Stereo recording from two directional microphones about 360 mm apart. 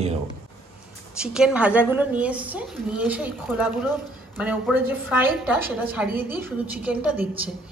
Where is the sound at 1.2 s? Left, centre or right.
Centre.